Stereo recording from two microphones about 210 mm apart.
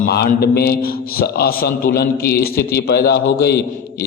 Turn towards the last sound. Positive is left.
turn(degrees=50)  # may be behind; listen again after turning